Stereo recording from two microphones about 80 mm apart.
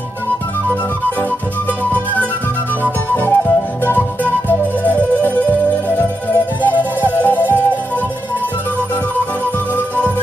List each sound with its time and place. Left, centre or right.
1.9 s music: left
9.8 s music: left